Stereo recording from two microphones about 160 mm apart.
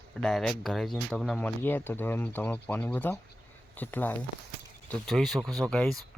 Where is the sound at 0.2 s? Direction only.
5° left (ahead or behind).